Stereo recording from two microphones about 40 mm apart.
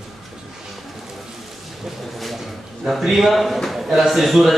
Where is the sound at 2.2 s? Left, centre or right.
Centre.